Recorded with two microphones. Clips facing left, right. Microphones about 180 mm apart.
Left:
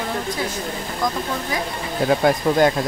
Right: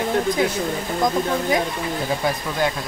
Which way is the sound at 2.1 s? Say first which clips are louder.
Left 10 dB; 55° left (ahead or behind).